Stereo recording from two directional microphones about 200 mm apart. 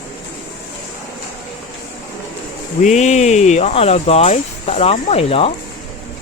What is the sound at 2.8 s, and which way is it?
Speech, 35° left (ahead or behind).